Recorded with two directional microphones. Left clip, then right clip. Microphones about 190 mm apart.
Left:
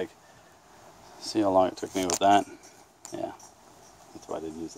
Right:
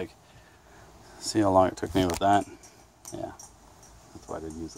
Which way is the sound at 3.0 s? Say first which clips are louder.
Left 2 dB; centre (ahead or behind).